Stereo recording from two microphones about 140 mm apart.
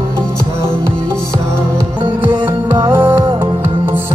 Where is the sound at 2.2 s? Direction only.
35° right (ahead or behind).